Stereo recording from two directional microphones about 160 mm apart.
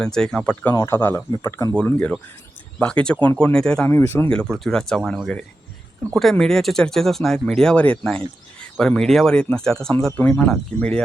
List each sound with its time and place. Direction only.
0.0 s speech: 5° left (ahead or behind)
0.7 s speech: 20° left (ahead or behind)
1.7 s speech: 5° left (ahead or behind)
3.9 s speech: 15° left (ahead or behind)
4.3 s speech: 5° left (ahead or behind)